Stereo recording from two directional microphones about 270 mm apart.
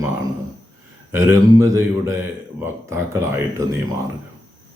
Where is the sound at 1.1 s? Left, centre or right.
Centre.